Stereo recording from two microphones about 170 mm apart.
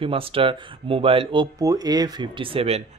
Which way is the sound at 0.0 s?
35° right (ahead or behind).